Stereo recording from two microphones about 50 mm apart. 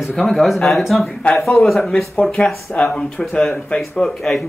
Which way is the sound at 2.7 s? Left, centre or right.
Left.